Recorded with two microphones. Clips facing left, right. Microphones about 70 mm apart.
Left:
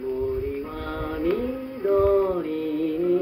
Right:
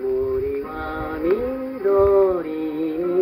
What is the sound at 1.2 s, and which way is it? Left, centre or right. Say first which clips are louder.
Music: right 4 dB; right.